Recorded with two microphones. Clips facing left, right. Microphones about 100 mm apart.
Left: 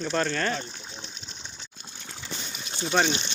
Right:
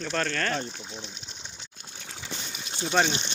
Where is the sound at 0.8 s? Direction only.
15° right (ahead or behind).